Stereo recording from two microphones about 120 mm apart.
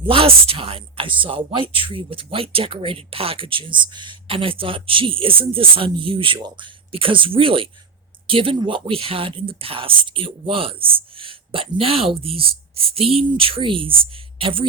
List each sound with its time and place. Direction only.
0.0 s speech: 50° right (ahead or behind)